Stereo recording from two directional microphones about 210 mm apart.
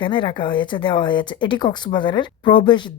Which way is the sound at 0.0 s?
25° left (ahead or behind).